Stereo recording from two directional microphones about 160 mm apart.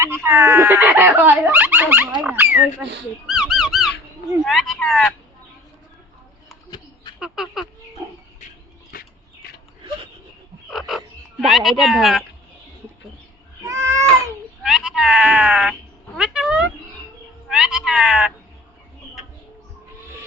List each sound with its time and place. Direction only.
0.0 s speech: 15° right (ahead or behind)
3.2 s squeak: 5° right (ahead or behind)
4.4 s speech: centre (ahead or behind)
6.7 s a sound: 25° left (ahead or behind)
7.2 s speech: 5° right (ahead or behind)
10.7 s frog: centre (ahead or behind)
13.7 s cat: 20° right (ahead or behind)
14.6 s speech: 5° right (ahead or behind)
16.1 s cat: 5° right (ahead or behind)